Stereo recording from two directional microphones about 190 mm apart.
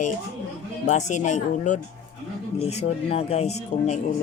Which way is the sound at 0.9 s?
40° left (ahead or behind).